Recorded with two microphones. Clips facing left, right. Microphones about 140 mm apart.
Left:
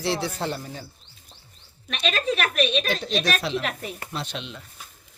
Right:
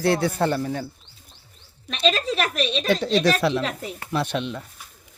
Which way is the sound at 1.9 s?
30° right (ahead or behind).